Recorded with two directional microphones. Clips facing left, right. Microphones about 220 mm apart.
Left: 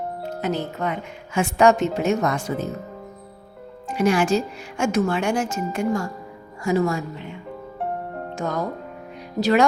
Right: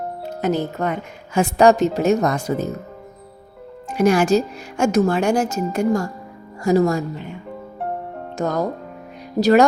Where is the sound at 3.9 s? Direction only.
40° right (ahead or behind).